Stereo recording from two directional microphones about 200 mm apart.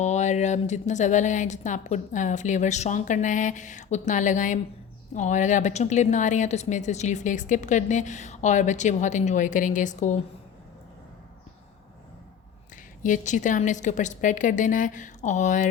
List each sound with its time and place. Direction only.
0.0 s speech: 35° left (ahead or behind)
13.0 s speech: 40° left (ahead or behind)